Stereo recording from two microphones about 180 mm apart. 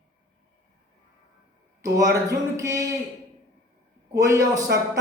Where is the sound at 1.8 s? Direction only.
20° right (ahead or behind).